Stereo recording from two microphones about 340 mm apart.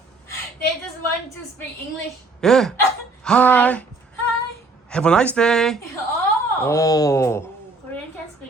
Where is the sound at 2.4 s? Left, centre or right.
Centre.